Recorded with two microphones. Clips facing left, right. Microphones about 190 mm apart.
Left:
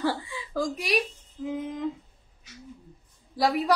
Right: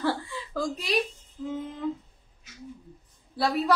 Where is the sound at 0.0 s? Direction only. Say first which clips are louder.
Even; 15° left (ahead or behind).